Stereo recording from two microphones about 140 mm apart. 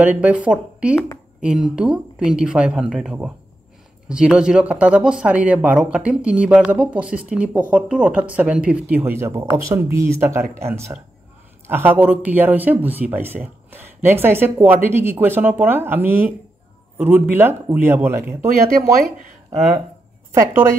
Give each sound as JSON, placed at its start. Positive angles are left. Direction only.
{"t": 0.0, "sound": "speech", "side_deg": -10}
{"t": 18.9, "sound": "speech", "side_deg": -80}